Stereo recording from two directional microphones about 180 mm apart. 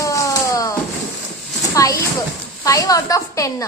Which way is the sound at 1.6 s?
20° left (ahead or behind).